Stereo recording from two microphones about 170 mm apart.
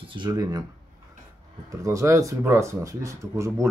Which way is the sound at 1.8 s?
20° right (ahead or behind).